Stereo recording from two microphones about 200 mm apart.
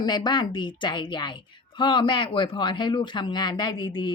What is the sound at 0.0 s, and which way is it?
A woman's voice, 20° left (ahead or behind).